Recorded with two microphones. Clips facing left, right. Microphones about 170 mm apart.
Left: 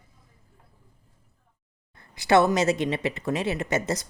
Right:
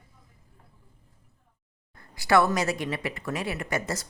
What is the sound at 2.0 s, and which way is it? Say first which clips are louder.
Speech: left 2 dB; 20° left (ahead or behind).